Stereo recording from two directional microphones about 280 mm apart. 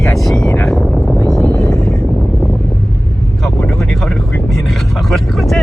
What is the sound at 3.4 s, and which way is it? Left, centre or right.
Vehicle, centre.